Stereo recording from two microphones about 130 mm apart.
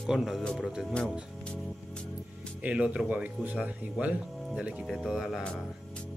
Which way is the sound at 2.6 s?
10° right (ahead or behind).